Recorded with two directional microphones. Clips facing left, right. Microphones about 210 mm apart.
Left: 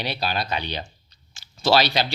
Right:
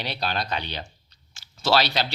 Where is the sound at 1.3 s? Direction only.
15° left (ahead or behind).